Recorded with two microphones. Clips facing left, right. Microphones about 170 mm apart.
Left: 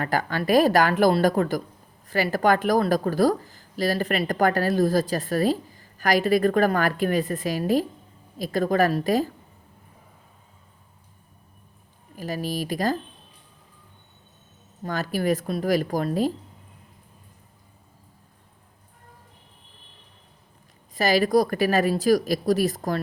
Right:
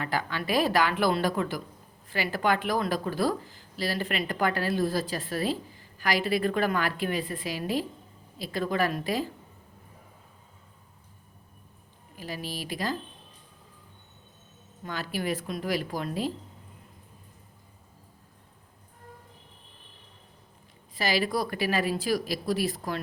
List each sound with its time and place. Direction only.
0.0 s speech: 45° left (ahead or behind)
12.1 s speech: 45° left (ahead or behind)
14.8 s speech: 45° left (ahead or behind)
20.9 s speech: 45° left (ahead or behind)